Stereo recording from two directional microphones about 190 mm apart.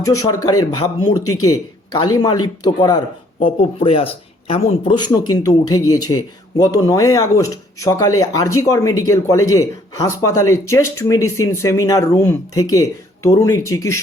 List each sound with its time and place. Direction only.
0.0 s speech: 15° left (ahead or behind)
1.9 s speech: 20° left (ahead or behind)